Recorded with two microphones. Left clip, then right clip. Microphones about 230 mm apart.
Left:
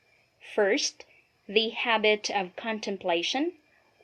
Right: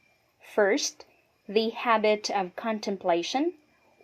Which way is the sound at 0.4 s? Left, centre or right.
Right.